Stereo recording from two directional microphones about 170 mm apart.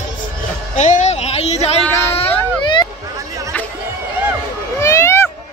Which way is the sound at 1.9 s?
15° left (ahead or behind).